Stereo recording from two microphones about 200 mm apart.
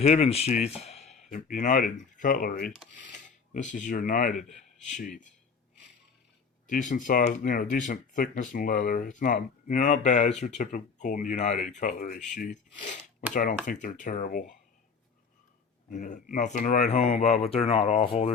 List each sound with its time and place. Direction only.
0.0 s speech: 30° left (ahead or behind)
6.7 s speech: 40° left (ahead or behind)
15.9 s speech: 35° left (ahead or behind)